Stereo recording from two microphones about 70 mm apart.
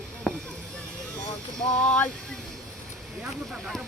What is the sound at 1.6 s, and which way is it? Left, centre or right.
Speech, centre.